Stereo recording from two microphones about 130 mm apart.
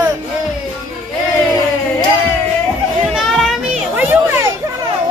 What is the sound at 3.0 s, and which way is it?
Children playing, centre (ahead or behind).